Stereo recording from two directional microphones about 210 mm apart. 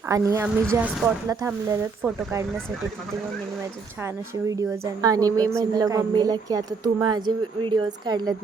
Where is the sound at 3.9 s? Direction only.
10° right (ahead or behind).